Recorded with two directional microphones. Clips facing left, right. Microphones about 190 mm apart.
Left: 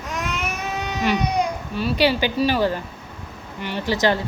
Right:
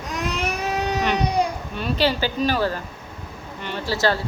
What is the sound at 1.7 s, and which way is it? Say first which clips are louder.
Speech: left 2 dB; 10° left (ahead or behind).